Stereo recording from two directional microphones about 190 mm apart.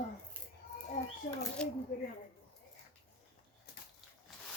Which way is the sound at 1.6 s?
5° left (ahead or behind).